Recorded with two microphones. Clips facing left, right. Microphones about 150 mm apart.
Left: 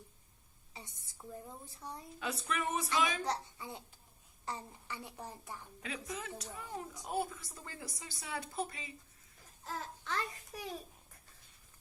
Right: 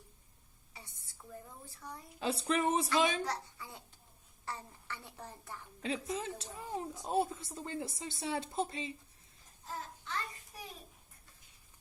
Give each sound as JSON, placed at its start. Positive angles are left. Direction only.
{"t": 0.7, "sound": "a sound", "side_deg": 20}
{"t": 2.1, "sound": "speech", "side_deg": -30}
{"t": 3.2, "sound": "a child's voice", "side_deg": 20}
{"t": 5.8, "sound": "speech", "side_deg": -30}
{"t": 9.6, "sound": "babbling", "side_deg": 90}